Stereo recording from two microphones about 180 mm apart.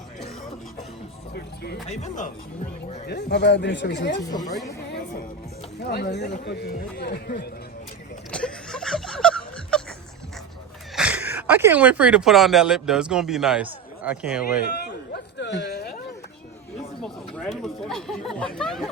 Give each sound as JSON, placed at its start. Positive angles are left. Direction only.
{"t": 1.3, "sound": "music", "side_deg": 60}
{"t": 1.9, "sound": "speech", "side_deg": 40}
{"t": 3.1, "sound": "speech", "side_deg": 65}
{"t": 4.2, "sound": "speech", "side_deg": 20}
{"t": 4.9, "sound": "music", "side_deg": 65}
{"t": 5.8, "sound": "speech", "side_deg": 65}
{"t": 8.3, "sound": "a sound", "side_deg": 5}
{"t": 10.9, "sound": "speech", "side_deg": -5}
{"t": 15.1, "sound": "a sound", "side_deg": 70}
{"t": 17.0, "sound": "speech", "side_deg": 5}